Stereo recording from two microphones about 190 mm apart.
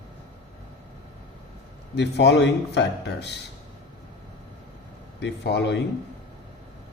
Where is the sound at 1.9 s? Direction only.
65° left (ahead or behind).